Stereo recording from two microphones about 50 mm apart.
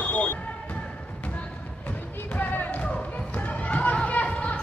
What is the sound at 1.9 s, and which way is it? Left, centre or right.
Basketball bounce, left.